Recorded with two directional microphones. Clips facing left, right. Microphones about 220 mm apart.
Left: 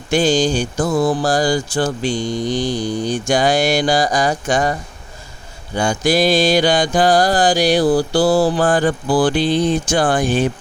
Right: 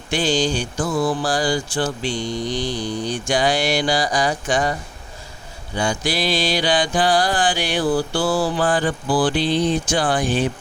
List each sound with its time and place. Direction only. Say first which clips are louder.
0.1 s music: left 5 dB; 45° left (ahead or behind)
5.7 s music: left 6 dB; 45° left (ahead or behind)